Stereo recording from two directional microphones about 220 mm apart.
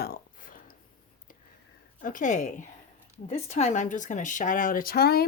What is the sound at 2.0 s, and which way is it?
A woman's voice, 40° left (ahead or behind).